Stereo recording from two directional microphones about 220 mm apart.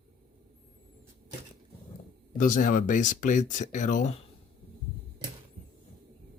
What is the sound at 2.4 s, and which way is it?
Speech, 35° left (ahead or behind).